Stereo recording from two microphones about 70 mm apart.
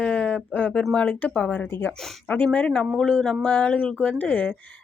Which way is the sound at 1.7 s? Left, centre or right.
Left.